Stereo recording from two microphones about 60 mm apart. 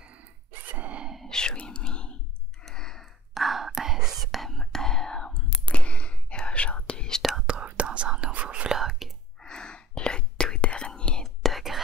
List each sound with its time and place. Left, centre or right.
0.5 s grunt: right
1.2 s whispering: centre
2.6 s sigh: centre
3.3 s whispering: centre
7.4 s whispering: centre
8.7 s whispering: centre
9.4 s whispering: centre
11.2 s whispering: centre